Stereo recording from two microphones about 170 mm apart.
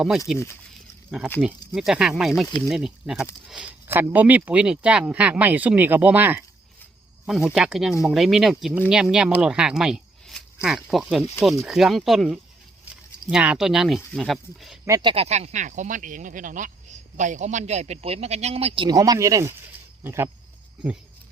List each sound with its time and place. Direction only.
0.3 s speech: centre (ahead or behind)
1.7 s speech: centre (ahead or behind)
14.8 s speech: 20° right (ahead or behind)
15.1 s a man's voice: 40° right (ahead or behind); by 20.3 s 15° right (ahead or behind)